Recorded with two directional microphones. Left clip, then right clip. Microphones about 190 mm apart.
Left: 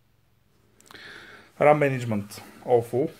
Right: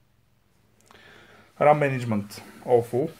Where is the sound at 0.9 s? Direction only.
40° left (ahead or behind).